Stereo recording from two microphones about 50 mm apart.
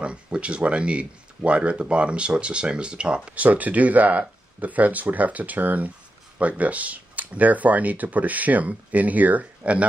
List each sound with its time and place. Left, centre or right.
0.0 s speech: right
3.3 s speech: right